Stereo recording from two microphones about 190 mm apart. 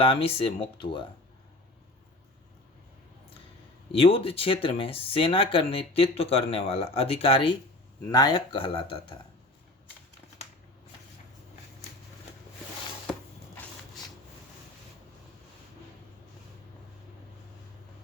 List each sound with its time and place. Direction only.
0.0 s speech: 30° left (ahead or behind)
3.9 s speech: 30° left (ahead or behind)